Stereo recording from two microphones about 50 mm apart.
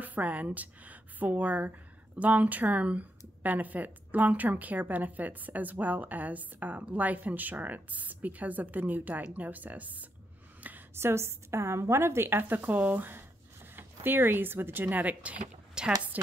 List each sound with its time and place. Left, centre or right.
0.0 s speech: right
10.6 s a sound: right
11.0 s a woman's voice: right